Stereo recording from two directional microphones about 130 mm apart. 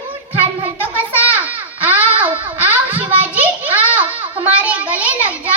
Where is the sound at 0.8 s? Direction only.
15° right (ahead or behind).